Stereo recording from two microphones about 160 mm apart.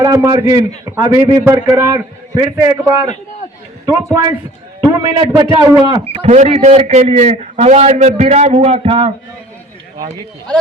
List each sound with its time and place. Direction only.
0.0 s a man's voice: 20° right (ahead or behind)
6.2 s a man's voice: 45° right (ahead or behind)